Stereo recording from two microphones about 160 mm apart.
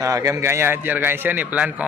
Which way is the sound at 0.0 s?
20° right (ahead or behind).